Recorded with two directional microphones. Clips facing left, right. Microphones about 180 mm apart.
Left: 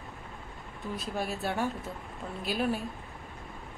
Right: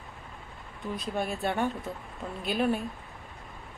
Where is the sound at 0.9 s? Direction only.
5° left (ahead or behind).